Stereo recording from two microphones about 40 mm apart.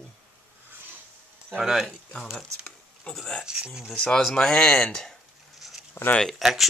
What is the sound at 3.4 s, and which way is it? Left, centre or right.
Speech, centre.